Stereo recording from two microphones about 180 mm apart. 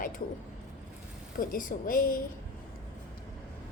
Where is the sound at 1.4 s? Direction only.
50° left (ahead or behind).